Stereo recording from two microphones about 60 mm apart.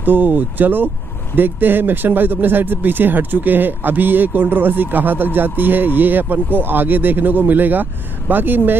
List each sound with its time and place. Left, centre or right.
0.0 s speech: right